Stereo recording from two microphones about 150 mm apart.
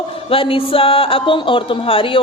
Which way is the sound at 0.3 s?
35° left (ahead or behind).